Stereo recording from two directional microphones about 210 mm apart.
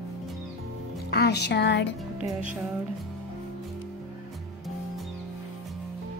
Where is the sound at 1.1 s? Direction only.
50° left (ahead or behind).